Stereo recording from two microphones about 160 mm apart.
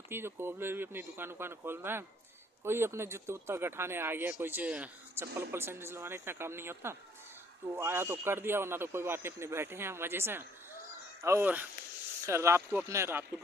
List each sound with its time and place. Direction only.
0.1 s speech: 15° right (ahead or behind)